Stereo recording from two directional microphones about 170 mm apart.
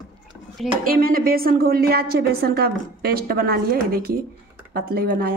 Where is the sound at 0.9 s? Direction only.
60° right (ahead or behind).